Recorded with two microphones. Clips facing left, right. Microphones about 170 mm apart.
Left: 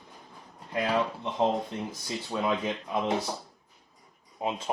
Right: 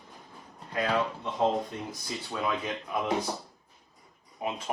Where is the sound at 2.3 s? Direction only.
25° left (ahead or behind).